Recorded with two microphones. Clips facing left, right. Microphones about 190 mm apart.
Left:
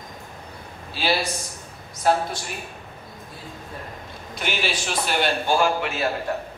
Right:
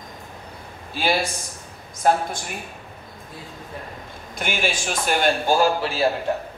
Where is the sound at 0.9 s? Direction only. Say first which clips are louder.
Right 1 dB; 50° right (ahead or behind).